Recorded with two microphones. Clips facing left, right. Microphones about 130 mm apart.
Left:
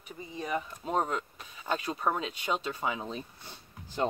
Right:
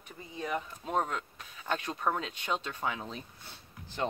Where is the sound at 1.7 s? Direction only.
10° left (ahead or behind).